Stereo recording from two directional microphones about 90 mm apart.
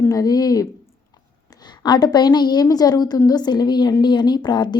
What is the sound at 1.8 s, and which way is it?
A woman's voice, 50° left (ahead or behind).